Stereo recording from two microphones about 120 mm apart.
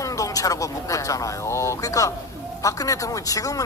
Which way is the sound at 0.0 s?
30° left (ahead or behind).